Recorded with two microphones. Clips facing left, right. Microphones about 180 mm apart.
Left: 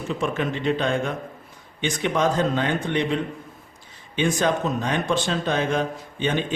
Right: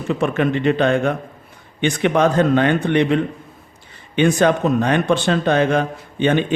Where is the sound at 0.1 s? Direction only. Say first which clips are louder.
Right 7 dB; 65° right (ahead or behind).